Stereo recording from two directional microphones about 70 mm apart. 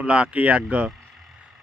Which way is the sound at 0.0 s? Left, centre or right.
Centre.